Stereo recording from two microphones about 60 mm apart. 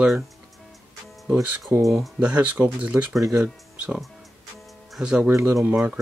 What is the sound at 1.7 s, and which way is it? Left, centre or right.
Speech, right.